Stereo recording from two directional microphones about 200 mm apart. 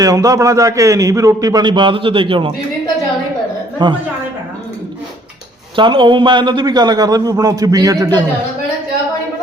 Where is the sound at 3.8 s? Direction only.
25° right (ahead or behind).